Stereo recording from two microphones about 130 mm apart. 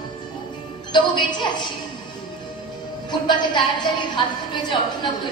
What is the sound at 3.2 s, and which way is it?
A woman's voice, 35° left (ahead or behind).